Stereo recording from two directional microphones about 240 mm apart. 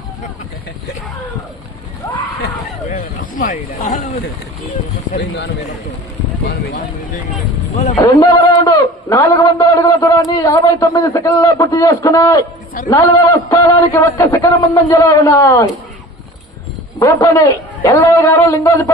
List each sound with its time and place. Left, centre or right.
2.9 s speech: left
5.1 s speech: left
7.7 s speech: left
8.0 s a man's voice: centre
17.0 s a man's voice: centre